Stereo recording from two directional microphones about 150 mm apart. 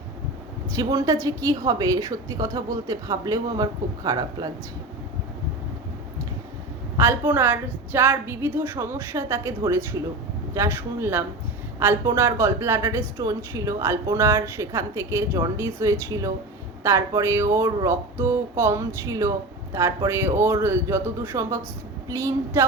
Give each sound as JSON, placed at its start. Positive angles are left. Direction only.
{"t": 0.7, "sound": "a woman's voice", "side_deg": -25}
{"t": 6.9, "sound": "a woman's voice", "side_deg": -15}